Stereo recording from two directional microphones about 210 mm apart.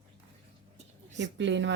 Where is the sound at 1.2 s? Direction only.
60° right (ahead or behind).